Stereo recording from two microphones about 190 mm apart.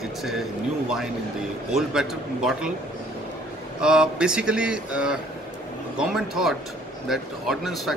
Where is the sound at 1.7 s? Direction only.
5° right (ahead or behind).